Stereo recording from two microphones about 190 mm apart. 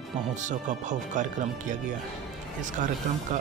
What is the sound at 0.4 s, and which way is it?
Speech, 40° right (ahead or behind).